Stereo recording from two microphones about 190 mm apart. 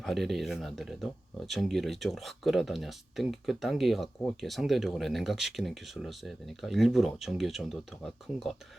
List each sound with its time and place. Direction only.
0.0 s speech: centre (ahead or behind)